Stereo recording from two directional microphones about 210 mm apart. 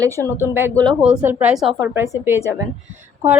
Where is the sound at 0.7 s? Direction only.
5° left (ahead or behind).